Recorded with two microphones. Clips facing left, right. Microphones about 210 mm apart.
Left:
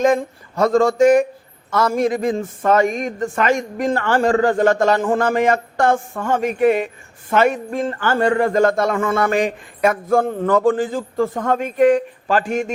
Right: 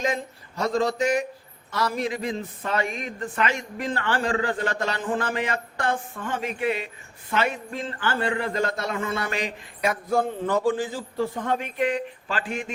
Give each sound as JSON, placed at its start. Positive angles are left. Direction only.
{"t": 0.0, "sound": "a man's voice", "side_deg": 50}